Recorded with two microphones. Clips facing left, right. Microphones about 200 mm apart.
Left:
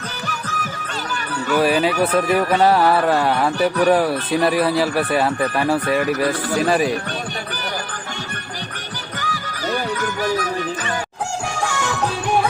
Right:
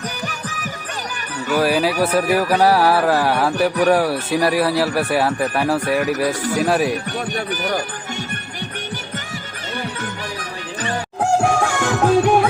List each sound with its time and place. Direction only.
1.5 s speech: centre (ahead or behind)
9.2 s music: 25° right (ahead or behind)
11.2 s music: 55° right (ahead or behind)